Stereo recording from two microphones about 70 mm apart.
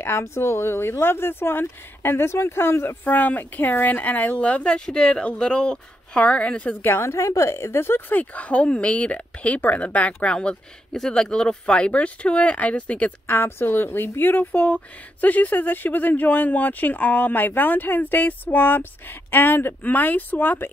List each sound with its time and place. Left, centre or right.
0.0 s speech: left
3.0 s speech: left
6.8 s a woman's voice: left
13.4 s a woman's voice: left